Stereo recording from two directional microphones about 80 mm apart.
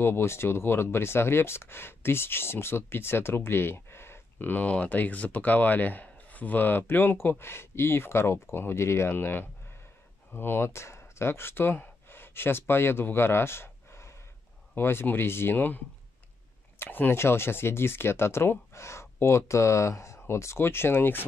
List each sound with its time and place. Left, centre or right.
0.0 s speech: left
16.8 s speech: left